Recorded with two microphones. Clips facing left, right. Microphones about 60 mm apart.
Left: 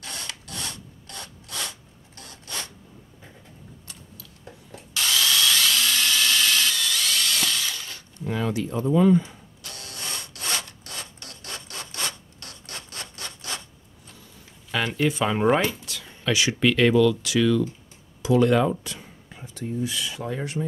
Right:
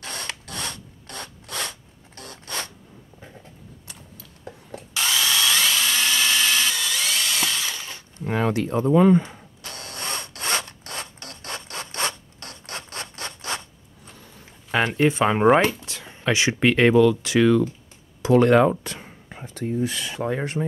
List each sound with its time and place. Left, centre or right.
0.0 s mechanisms: right
4.5 s rub: right
4.9 s tools: centre
8.3 s tools: right
14.7 s speech: right